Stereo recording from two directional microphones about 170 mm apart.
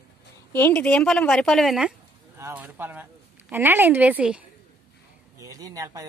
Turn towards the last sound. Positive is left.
turn(degrees=-20)  # may be behind; listen again after turning